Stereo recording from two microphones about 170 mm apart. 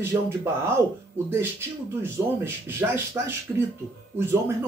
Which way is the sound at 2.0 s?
15° right (ahead or behind).